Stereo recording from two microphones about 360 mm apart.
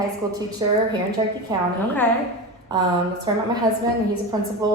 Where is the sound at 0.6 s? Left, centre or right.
Centre.